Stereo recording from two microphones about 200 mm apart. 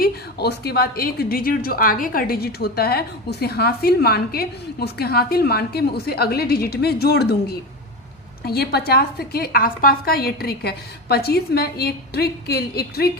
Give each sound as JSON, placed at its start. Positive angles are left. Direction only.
{"t": 0.0, "sound": "a woman's voice", "side_deg": 50}